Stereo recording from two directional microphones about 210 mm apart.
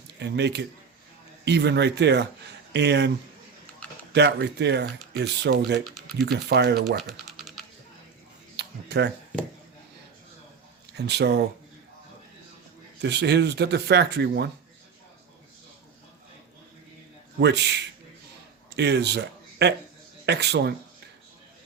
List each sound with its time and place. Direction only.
0.2 s speech: 55° right (ahead or behind)
4.1 s speech: 55° right (ahead or behind)
7.3 s typing: centre (ahead or behind)
8.5 s a sound: 55° right (ahead or behind)
10.9 s speech: 55° right (ahead or behind)
13.0 s speech: 55° right (ahead or behind)
17.4 s speech: 55° right (ahead or behind)